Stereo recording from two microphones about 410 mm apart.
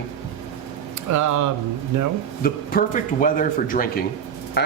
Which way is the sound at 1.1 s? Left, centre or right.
Right.